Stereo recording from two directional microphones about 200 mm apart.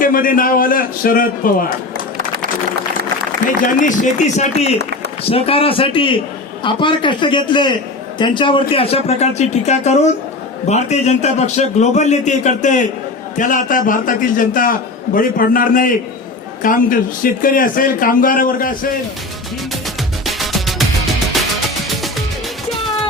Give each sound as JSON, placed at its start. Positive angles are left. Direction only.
{"t": 0.0, "sound": "a man's voice", "side_deg": 45}
{"t": 3.4, "sound": "a man's voice", "side_deg": 40}
{"t": 20.2, "sound": "music", "side_deg": 0}